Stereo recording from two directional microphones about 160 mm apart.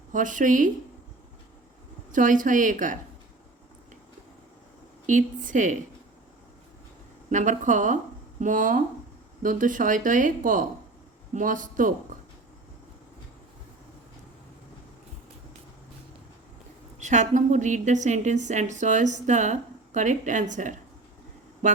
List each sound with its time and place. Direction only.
0.1 s speech: 55° right (ahead or behind)
2.1 s speech: 55° right (ahead or behind)
5.0 s a woman's voice: 55° right (ahead or behind)
7.3 s a woman's voice: 50° right (ahead or behind)
17.0 s a woman's voice: 50° right (ahead or behind)